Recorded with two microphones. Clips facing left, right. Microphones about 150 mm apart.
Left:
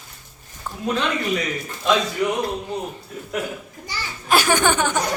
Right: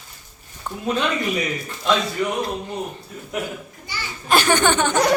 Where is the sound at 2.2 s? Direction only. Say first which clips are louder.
Left 2 dB; centre (ahead or behind).